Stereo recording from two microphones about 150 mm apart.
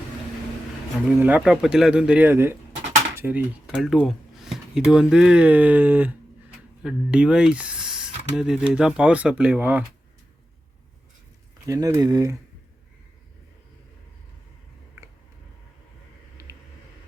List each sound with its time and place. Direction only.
1.2 s speech: 5° right (ahead or behind)
3.8 s speech: centre (ahead or behind)
11.6 s speech: 20° right (ahead or behind)